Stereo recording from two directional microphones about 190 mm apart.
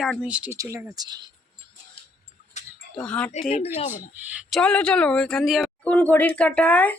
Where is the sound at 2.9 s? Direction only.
5° left (ahead or behind).